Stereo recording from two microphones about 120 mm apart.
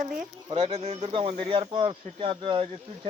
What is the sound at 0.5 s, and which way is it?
Speech, 60° right (ahead or behind).